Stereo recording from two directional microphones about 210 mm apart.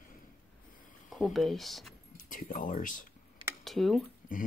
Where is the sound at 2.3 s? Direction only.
40° left (ahead or behind).